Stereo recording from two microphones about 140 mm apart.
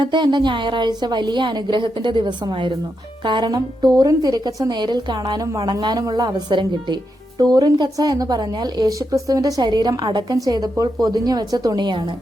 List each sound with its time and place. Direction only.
0.0 s a woman's voice: 35° right (ahead or behind)